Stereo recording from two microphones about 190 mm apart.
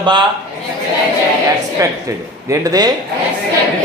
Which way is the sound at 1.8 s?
15° right (ahead or behind).